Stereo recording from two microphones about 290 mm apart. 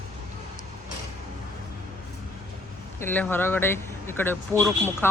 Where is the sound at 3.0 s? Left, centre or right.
Centre.